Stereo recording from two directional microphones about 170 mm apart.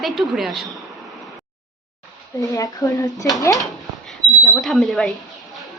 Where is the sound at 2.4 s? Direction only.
20° left (ahead or behind).